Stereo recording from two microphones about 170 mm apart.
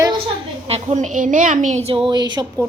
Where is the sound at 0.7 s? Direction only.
40° right (ahead or behind).